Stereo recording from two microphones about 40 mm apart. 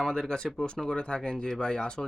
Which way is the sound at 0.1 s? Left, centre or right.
Centre.